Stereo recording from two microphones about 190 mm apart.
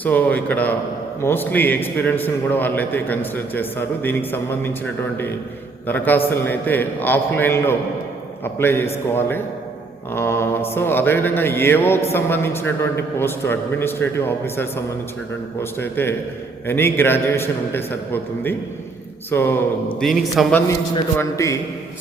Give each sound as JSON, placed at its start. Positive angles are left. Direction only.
{"t": 0.0, "sound": "a man's voice", "side_deg": 10}
{"t": 5.9, "sound": "a man's voice", "side_deg": 10}
{"t": 15.8, "sound": "a man's voice", "side_deg": 10}
{"t": 20.0, "sound": "a man's voice", "side_deg": 0}
{"t": 20.7, "sound": "a man's voice", "side_deg": 15}